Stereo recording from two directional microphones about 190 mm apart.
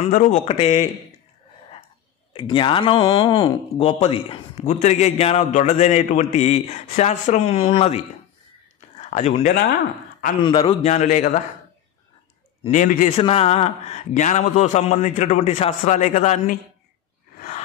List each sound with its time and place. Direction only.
0.0 s speech: 40° left (ahead or behind)
2.3 s speech: 25° left (ahead or behind)
12.6 s speech: 40° left (ahead or behind)
17.4 s a sound: 40° left (ahead or behind)